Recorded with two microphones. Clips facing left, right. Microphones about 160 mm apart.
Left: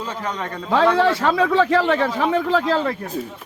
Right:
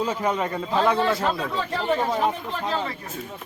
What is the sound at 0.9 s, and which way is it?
Speech, 85° left.